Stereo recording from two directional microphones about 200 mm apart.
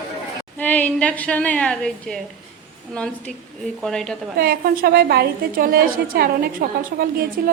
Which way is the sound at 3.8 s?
5° left (ahead or behind).